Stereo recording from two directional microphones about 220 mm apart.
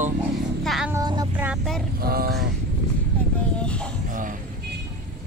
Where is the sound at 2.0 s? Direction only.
45° right (ahead or behind).